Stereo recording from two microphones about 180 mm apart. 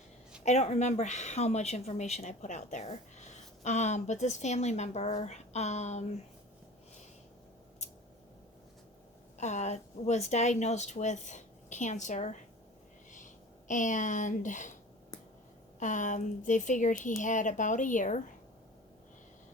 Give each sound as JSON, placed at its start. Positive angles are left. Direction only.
{"t": 0.4, "sound": "speech", "side_deg": 40}
{"t": 9.4, "sound": "speech", "side_deg": 40}
{"t": 15.8, "sound": "speech", "side_deg": 45}